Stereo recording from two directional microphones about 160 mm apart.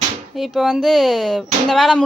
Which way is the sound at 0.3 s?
Centre (ahead or behind).